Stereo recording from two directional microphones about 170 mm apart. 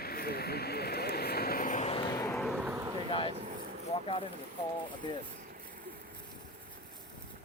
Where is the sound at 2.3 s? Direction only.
Centre (ahead or behind).